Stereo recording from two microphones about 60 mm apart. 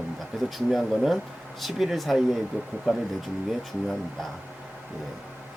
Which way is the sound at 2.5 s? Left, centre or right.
Right.